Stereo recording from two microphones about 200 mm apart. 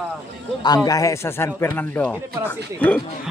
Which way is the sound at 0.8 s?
15° left (ahead or behind).